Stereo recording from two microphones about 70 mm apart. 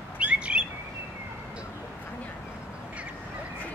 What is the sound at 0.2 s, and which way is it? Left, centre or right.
Bird, centre.